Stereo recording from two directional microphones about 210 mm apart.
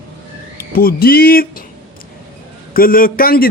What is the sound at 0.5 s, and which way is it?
Speech, 45° left (ahead or behind).